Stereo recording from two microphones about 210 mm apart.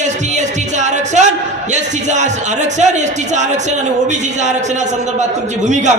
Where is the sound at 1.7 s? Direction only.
35° right (ahead or behind).